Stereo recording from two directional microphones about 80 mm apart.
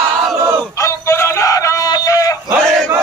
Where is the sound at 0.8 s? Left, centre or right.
Left.